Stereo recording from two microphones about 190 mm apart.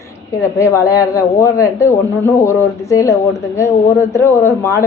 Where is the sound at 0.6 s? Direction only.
15° left (ahead or behind).